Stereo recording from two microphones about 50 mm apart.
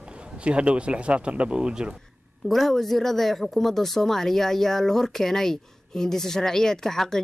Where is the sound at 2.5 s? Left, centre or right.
Centre.